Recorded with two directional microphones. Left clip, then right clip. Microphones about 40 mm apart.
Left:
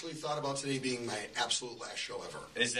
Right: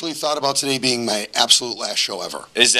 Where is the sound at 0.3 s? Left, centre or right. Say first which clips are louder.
Right 15 dB; right.